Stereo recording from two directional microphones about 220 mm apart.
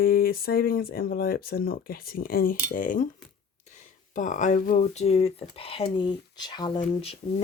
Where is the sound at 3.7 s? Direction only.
35° left (ahead or behind).